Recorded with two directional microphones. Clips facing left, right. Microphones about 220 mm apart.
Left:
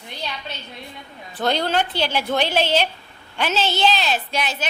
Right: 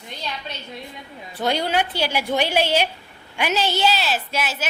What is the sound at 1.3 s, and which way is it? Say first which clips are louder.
A woman's voice: left 1 dB; 10° right (ahead or behind).